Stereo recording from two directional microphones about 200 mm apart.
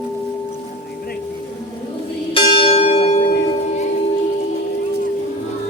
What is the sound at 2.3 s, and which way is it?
Church bell, 25° left (ahead or behind).